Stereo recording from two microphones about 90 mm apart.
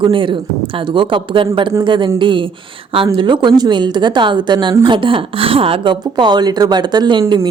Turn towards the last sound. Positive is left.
turn(degrees=-55)  # may be behind; listen again after turning